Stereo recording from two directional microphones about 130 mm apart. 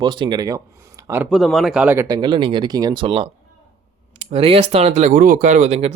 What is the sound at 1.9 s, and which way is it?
Speech, 30° right (ahead or behind).